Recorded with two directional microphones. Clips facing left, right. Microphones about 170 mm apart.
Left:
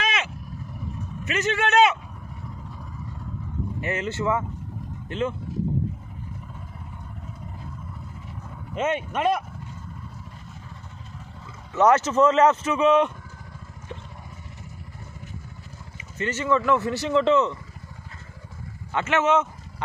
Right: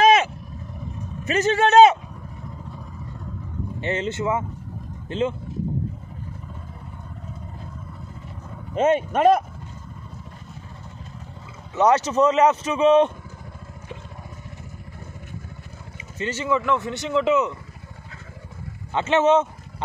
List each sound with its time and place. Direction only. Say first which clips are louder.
0.0 s vehicle: right 13 dB; 45° right (ahead or behind)
1.2 s speech: right 5 dB; 35° right (ahead or behind)
3.8 s speech: right 2 dB; 25° right (ahead or behind)
8.7 s speech: right 6 dB; 40° right (ahead or behind)
11.7 s speech: even; 15° right (ahead or behind)
16.2 s speech: even; 10° right (ahead or behind)
16.6 s speech: left 2 dB; centre (ahead or behind)
18.9 s speech: right 4 dB; 30° right (ahead or behind)